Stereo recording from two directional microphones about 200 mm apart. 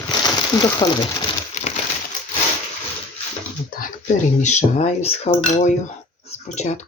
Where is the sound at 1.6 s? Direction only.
35° left (ahead or behind).